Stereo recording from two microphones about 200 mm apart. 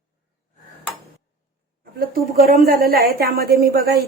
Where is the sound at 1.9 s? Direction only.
50° right (ahead or behind).